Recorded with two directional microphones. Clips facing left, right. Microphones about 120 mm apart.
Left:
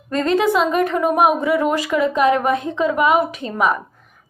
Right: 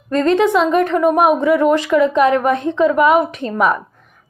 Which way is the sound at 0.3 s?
5° left (ahead or behind).